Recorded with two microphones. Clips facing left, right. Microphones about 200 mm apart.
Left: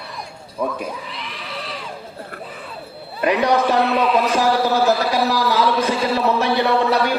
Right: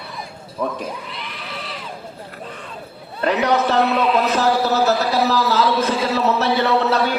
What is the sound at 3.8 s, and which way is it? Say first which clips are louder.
Speech: even; centre (ahead or behind).